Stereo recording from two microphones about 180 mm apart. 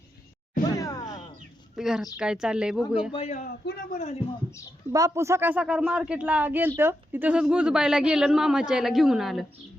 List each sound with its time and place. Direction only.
0.8 s a sound: 20° left (ahead or behind)
1.7 s speech: 5° right (ahead or behind)
3.1 s speech: 35° left (ahead or behind)
4.9 s speech: 20° right (ahead or behind); by 9.5 s centre (ahead or behind)